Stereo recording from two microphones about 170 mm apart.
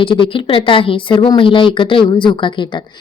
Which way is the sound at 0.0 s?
30° left (ahead or behind).